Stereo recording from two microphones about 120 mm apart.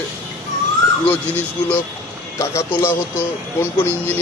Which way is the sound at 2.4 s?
20° left (ahead or behind).